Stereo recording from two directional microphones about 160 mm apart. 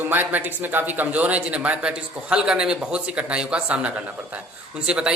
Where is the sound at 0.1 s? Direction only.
10° right (ahead or behind).